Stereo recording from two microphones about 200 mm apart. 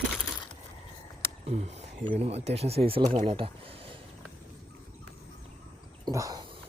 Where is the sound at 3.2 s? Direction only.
30° right (ahead or behind).